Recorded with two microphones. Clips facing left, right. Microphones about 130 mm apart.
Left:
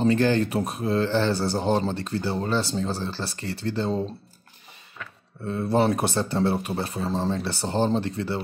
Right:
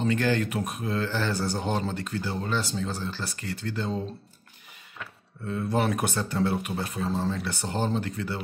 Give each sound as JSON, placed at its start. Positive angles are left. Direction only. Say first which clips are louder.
{"t": 0.0, "sound": "speech", "louder": "left 4 dB", "side_deg": 30}
{"t": 5.4, "sound": "speech", "louder": "left 4 dB", "side_deg": 30}